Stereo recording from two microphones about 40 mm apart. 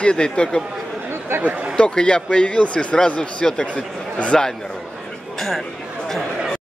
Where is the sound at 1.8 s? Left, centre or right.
Left.